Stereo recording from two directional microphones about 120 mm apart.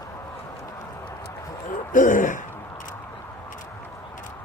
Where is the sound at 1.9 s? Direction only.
90° left.